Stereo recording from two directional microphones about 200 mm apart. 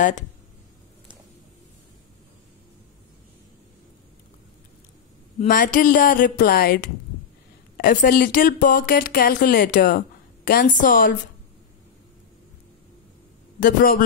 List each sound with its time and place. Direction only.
5.4 s speech: 40° left (ahead or behind)
13.6 s speech: 45° left (ahead or behind)